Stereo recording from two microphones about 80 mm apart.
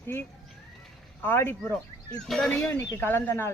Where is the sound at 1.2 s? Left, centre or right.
Left.